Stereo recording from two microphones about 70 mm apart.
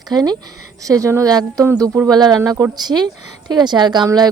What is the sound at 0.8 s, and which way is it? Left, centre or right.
Speech, right.